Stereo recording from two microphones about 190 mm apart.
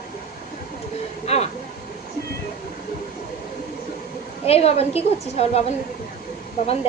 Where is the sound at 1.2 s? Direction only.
35° left (ahead or behind).